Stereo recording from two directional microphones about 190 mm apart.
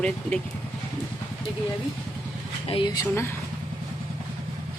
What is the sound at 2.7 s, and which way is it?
Speech, 25° left (ahead or behind).